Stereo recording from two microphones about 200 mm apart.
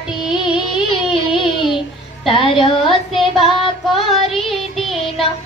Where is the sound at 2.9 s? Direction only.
Centre (ahead or behind).